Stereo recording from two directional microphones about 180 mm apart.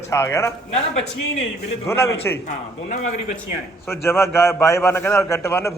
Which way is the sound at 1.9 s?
15° left (ahead or behind).